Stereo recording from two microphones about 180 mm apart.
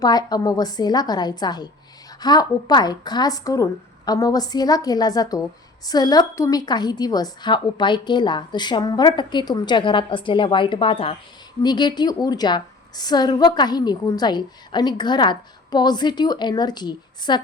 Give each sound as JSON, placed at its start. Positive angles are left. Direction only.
{"t": 0.0, "sound": "a woman's voice", "side_deg": 20}